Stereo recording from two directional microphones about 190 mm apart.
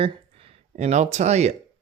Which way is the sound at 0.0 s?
30° right (ahead or behind).